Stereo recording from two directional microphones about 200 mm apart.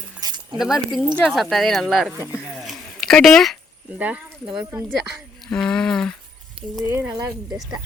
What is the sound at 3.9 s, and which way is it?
Speech, 5° right (ahead or behind).